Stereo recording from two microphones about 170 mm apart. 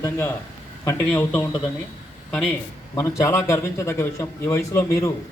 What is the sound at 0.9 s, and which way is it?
Speech, 10° left (ahead or behind).